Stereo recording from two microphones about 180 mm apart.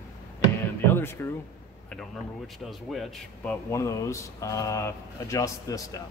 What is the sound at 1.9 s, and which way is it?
Speech, 5° left (ahead or behind).